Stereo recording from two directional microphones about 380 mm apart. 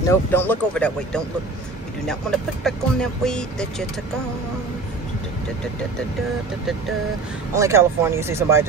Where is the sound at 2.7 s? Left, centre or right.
Centre.